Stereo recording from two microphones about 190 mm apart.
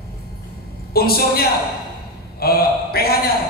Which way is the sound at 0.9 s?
55° left (ahead or behind).